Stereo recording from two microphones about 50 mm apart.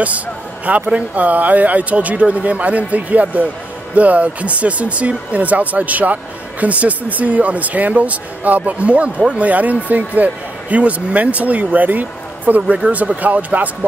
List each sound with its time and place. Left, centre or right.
0.7 s speech: right